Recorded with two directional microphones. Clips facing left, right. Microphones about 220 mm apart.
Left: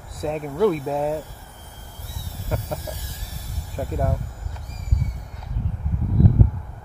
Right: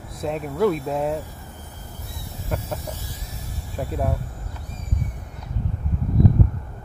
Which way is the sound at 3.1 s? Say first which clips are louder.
Right 2 dB; 35° left (ahead or behind).